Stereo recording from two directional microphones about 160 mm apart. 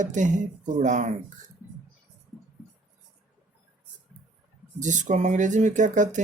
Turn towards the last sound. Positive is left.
turn(degrees=-50)  # may be behind; listen again after turning